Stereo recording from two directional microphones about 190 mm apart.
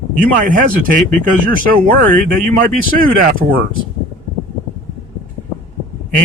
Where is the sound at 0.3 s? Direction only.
45° right (ahead or behind).